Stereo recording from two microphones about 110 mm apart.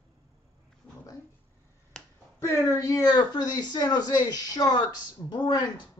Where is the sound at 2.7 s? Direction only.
30° left (ahead or behind).